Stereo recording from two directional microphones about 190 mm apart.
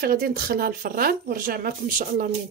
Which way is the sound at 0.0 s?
55° right (ahead or behind).